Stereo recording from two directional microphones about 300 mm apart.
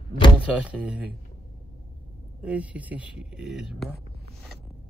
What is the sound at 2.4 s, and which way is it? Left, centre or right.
Speech, centre.